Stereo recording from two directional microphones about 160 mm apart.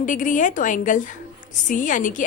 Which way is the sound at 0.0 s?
55° left (ahead or behind).